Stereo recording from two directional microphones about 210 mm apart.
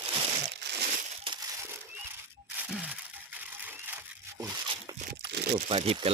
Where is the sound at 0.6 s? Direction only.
55° right (ahead or behind).